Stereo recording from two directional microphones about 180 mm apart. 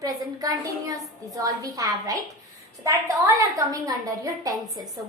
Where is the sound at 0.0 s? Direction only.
20° right (ahead or behind).